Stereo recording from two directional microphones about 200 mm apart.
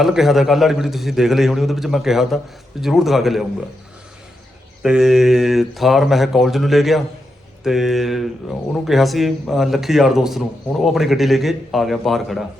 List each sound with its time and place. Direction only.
0.0 s a man's voice: centre (ahead or behind)
4.8 s a man's voice: 5° right (ahead or behind)